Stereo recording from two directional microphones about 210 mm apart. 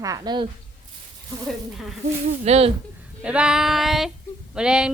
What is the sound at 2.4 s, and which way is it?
Speech, 30° right (ahead or behind).